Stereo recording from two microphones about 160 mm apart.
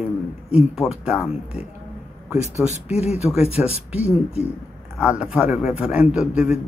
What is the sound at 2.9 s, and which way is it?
Speech, 5° right (ahead or behind).